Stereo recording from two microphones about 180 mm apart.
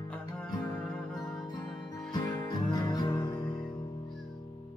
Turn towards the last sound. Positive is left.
turn(degrees=25)  # may be behind; listen again after turning